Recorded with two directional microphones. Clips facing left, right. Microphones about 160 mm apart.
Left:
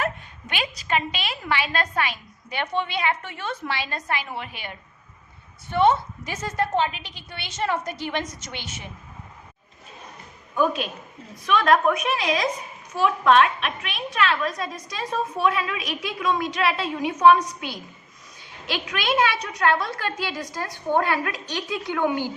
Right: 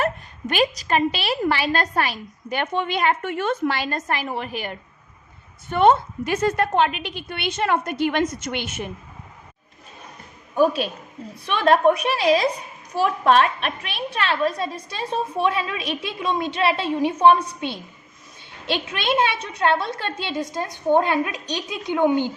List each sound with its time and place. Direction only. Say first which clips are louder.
0.0 s a woman's voice: right 4 dB; 40° right (ahead or behind)
5.7 s a woman's voice: right 3 dB; 55° right (ahead or behind)
10.5 s a woman's voice: right 4 dB; 35° right (ahead or behind); by 22.3 s 20° right (ahead or behind)